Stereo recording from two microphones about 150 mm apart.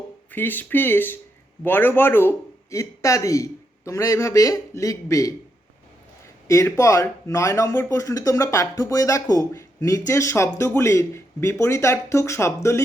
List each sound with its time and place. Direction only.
0.3 s a man's voice: 15° left (ahead or behind)
6.5 s a man's voice: 20° left (ahead or behind)